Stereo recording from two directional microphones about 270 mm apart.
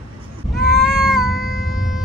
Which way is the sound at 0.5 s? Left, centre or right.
Centre.